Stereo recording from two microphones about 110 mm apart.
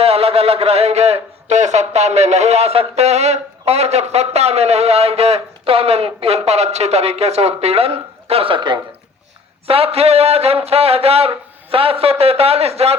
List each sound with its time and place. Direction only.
0.0 s a man's voice: 65° right (ahead or behind); by 8.8 s 45° right (ahead or behind)
9.6 s a man's voice: 60° right (ahead or behind)